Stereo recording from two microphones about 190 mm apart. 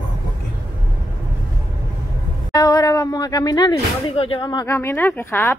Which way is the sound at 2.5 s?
20° left (ahead or behind).